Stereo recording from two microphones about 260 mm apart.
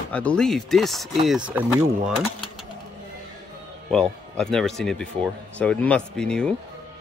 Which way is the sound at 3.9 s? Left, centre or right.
Centre.